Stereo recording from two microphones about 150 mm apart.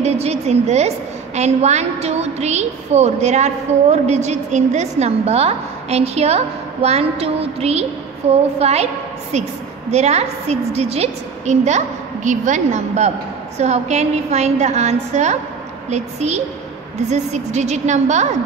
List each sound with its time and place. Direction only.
0.0 s a woman's voice: 45° right (ahead or behind)
9.8 s a woman's voice: 45° right (ahead or behind)